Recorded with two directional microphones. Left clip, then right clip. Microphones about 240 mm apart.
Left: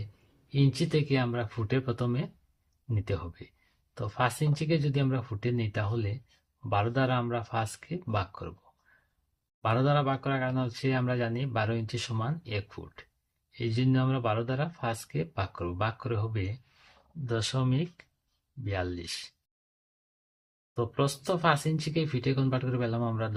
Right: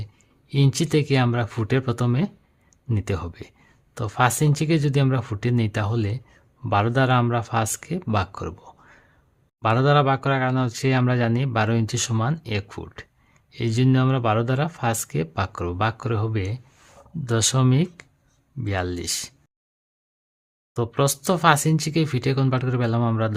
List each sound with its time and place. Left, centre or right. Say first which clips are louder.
0.0 s speech: right 5 dB; right
9.6 s speech: right 9 dB; right
20.7 s speech: right 7 dB; right